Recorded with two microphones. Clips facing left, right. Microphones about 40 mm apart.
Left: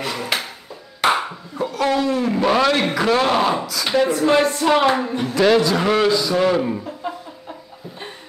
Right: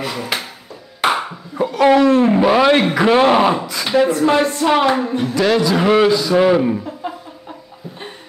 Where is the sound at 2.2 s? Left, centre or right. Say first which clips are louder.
Right 7 dB; right.